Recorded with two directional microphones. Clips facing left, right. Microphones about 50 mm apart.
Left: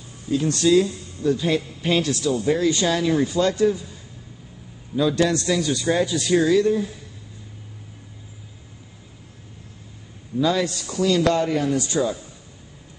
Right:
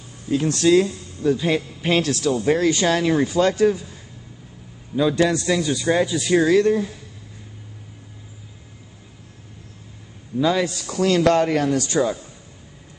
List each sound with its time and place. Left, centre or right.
0.6 s speech: right
4.9 s speech: right
6.2 s speech: right
6.5 s speech: right
10.4 s speech: right
10.9 s a man's voice: right